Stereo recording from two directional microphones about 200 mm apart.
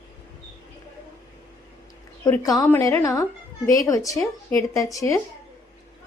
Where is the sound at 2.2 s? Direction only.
20° left (ahead or behind).